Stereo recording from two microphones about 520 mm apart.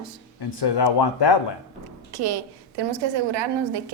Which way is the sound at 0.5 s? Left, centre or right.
Left.